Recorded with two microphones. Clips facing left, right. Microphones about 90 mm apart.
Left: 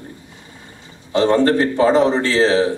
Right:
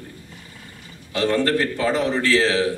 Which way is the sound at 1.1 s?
25° left (ahead or behind).